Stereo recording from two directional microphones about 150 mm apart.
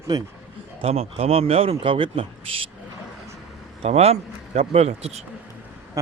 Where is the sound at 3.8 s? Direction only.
45° right (ahead or behind).